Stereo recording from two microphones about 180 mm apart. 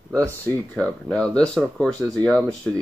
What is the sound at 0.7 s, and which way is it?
Speech, 5° left (ahead or behind).